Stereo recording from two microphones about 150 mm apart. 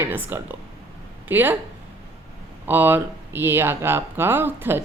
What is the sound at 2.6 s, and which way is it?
Speech, 15° right (ahead or behind).